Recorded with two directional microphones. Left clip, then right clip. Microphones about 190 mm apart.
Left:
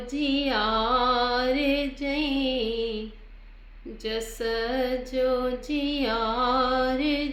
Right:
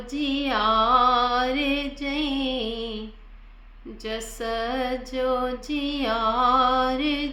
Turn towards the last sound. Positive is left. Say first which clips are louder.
# right 2 dB
turn(degrees=-20)  # may be behind; listen again after turning